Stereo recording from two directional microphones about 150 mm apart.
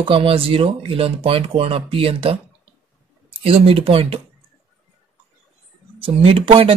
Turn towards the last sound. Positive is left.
turn(degrees=-40)  # may be behind; listen again after turning